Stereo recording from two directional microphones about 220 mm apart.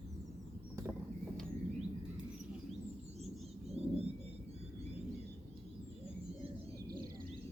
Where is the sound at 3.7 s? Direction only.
30° right (ahead or behind).